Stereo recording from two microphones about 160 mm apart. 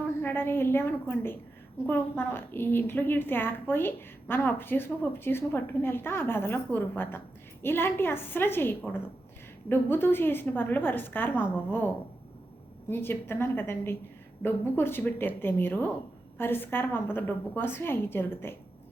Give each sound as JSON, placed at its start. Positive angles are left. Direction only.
{"t": 0.2, "sound": "a woman's voice", "side_deg": 15}